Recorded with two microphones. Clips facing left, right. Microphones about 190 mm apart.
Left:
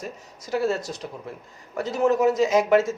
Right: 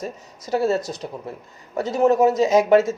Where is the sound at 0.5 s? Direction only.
30° right (ahead or behind).